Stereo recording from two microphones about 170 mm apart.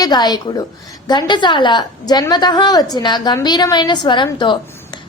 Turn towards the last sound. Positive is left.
turn(degrees=25)  # may be behind; listen again after turning